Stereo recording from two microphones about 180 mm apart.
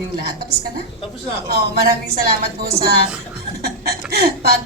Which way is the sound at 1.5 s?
60° right (ahead or behind).